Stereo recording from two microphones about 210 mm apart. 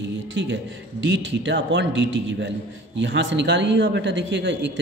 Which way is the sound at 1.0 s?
60° right (ahead or behind).